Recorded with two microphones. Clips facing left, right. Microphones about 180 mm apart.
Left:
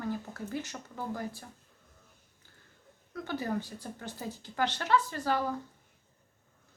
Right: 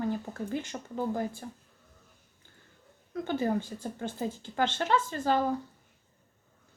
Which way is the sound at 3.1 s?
25° right (ahead or behind).